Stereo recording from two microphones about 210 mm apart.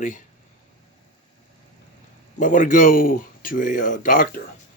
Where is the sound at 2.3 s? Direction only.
40° left (ahead or behind).